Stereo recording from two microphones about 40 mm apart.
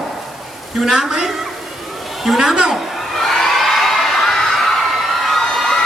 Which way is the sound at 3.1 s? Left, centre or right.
Centre.